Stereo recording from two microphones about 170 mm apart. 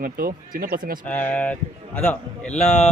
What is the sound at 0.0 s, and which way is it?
Speech, 55° right (ahead or behind).